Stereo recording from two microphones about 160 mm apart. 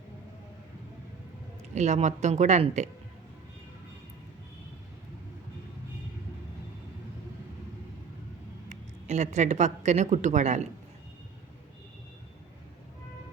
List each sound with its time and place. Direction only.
1.7 s speech: 45° right (ahead or behind)
8.7 s speech: 45° right (ahead or behind)